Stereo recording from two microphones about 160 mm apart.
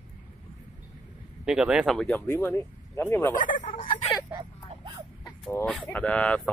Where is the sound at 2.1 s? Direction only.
15° left (ahead or behind).